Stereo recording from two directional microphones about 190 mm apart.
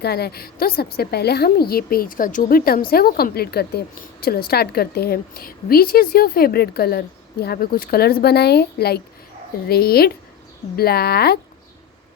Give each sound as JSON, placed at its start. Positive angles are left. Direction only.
{"t": 0.0, "sound": "a woman's voice", "side_deg": 55}